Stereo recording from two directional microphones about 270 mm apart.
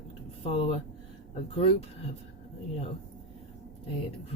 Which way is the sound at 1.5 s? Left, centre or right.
Left.